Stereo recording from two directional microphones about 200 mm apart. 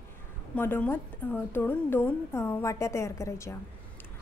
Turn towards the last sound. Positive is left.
turn(degrees=15)  # may be behind; listen again after turning